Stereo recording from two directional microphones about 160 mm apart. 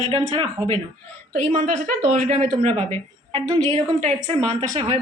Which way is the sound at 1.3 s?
45° right (ahead or behind).